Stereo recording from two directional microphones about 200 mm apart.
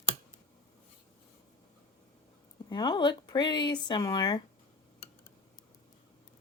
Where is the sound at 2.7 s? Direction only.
20° left (ahead or behind).